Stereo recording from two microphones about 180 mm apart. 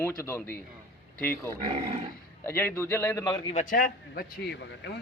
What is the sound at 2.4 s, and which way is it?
Speech, 10° left (ahead or behind).